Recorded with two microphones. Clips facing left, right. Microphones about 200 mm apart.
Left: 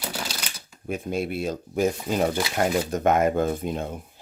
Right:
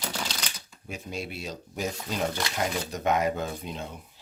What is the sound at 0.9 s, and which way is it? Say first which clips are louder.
Speech: left 9 dB; 55° left (ahead or behind).